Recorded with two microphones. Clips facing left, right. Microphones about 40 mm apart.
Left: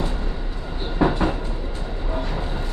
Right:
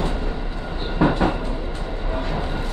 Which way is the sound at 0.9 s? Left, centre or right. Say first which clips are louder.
Right 1 dB; centre.